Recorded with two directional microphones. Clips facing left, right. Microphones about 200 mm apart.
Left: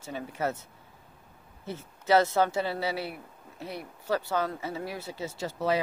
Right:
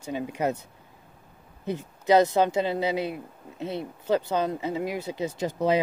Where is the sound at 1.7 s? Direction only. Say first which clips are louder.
Right 3 dB; 15° right (ahead or behind).